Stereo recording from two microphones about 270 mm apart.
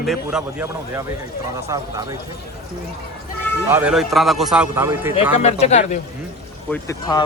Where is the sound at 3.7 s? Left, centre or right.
Centre.